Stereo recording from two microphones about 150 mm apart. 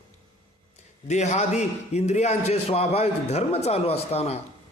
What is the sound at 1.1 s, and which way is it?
A man's voice, 50° left (ahead or behind).